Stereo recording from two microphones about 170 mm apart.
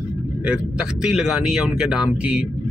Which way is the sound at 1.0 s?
Centre (ahead or behind).